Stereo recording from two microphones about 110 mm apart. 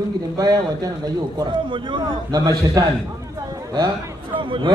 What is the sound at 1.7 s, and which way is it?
Speech, 50° right (ahead or behind).